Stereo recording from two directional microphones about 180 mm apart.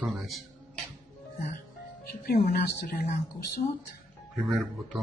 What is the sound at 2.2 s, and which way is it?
Speech, 65° left (ahead or behind).